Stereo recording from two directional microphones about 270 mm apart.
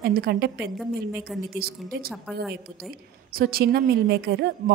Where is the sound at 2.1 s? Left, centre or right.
Centre.